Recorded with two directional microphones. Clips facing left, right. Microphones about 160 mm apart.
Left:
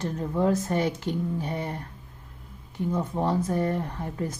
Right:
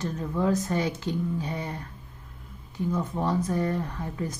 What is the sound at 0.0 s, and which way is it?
Speech, 35° left (ahead or behind).